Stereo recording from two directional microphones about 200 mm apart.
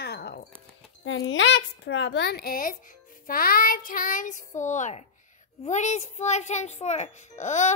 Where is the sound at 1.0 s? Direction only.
70° left (ahead or behind).